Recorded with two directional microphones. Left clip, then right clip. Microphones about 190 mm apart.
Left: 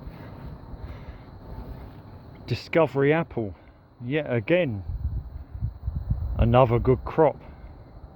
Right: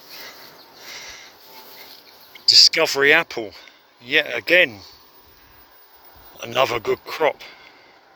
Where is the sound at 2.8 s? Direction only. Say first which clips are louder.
Right 5 dB; 5° right (ahead or behind).